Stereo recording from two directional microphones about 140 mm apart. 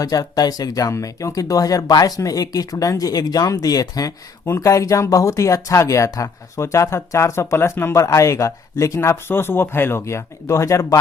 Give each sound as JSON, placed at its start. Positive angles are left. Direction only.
{"t": 0.0, "sound": "speech", "side_deg": 25}